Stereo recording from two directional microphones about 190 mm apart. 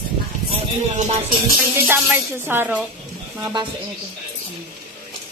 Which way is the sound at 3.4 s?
25° right (ahead or behind).